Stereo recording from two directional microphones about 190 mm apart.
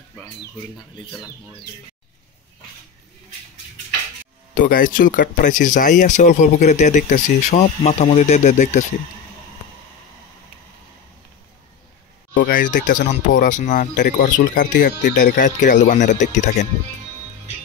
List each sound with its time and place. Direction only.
0.7 s speech: 20° left (ahead or behind)
4.6 s speech: 45° left (ahead or behind)
12.4 s speech: 45° left (ahead or behind)
14.9 s speech: 65° left (ahead or behind)
15.1 s speech: 45° left (ahead or behind)